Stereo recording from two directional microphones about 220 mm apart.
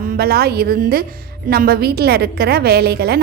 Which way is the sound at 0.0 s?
40° right (ahead or behind).